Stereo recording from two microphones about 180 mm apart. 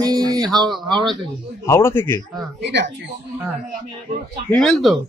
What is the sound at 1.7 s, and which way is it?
Speech, 15° left (ahead or behind).